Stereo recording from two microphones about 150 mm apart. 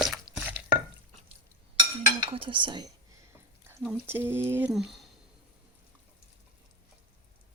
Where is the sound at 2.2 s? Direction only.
35° right (ahead or behind).